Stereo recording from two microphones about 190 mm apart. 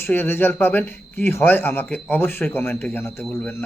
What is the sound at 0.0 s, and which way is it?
A man's voice, 10° left (ahead or behind).